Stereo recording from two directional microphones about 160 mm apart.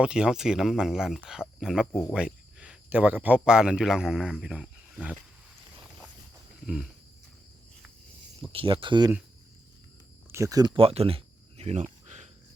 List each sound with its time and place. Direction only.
0.0 s speech: 5° right (ahead or behind)
1.9 s speech: 15° left (ahead or behind)
2.1 s speech: 5° right (ahead or behind)
8.5 s speech: 30° right (ahead or behind)
10.3 s a sound: 20° right (ahead or behind); by 12.3 s 45° right (ahead or behind)